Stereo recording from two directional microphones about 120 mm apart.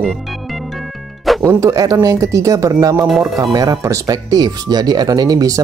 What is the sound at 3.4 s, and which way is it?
Speech, 35° right (ahead or behind).